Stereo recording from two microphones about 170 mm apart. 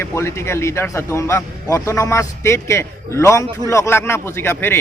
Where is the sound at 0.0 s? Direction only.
15° left (ahead or behind).